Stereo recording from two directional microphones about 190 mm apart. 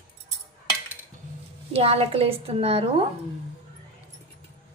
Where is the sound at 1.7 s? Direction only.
30° right (ahead or behind).